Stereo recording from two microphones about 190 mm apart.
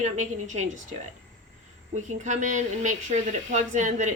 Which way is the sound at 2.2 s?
40° right (ahead or behind).